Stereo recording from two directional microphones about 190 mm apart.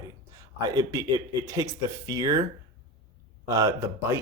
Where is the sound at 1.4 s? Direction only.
15° right (ahead or behind).